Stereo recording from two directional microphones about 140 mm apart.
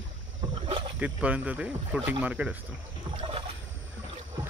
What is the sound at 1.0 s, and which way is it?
Speech, 10° right (ahead or behind).